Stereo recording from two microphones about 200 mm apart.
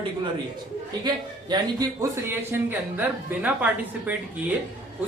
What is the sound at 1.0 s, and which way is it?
A man's voice, 20° right (ahead or behind).